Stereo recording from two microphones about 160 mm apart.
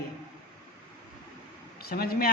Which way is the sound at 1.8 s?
70° left (ahead or behind).